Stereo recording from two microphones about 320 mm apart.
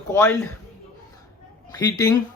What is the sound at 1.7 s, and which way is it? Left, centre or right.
Speech, centre.